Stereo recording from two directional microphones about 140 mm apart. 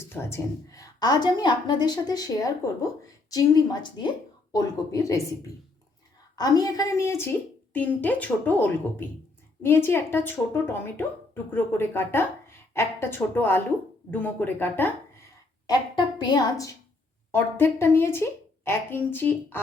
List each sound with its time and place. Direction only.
0.1 s a woman's voice: 20° left (ahead or behind)
6.3 s a woman's voice: 25° left (ahead or behind)
15.6 s a woman's voice: 30° left (ahead or behind)
17.3 s a woman's voice: 15° left (ahead or behind)